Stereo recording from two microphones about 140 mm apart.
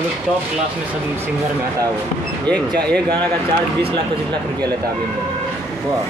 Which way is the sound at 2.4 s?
10° left (ahead or behind).